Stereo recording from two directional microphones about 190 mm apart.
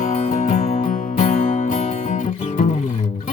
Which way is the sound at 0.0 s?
40° left (ahead or behind).